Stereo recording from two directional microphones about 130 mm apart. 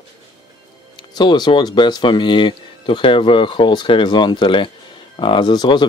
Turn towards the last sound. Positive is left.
turn(degrees=35)  # may be behind; listen again after turning